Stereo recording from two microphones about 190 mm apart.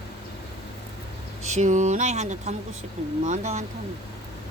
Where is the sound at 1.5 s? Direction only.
40° right (ahead or behind).